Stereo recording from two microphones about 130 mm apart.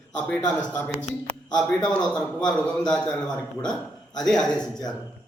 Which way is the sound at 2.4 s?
35° left (ahead or behind).